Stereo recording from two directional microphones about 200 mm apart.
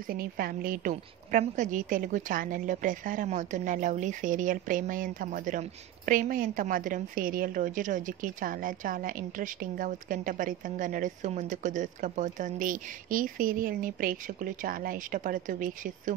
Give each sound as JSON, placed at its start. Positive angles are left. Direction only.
{"t": 0.0, "sound": "a woman's voice", "side_deg": -50}